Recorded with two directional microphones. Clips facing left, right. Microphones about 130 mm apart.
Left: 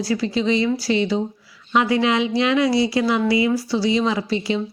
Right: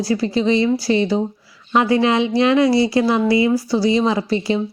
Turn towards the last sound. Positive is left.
turn(degrees=-40)  # may be behind; listen again after turning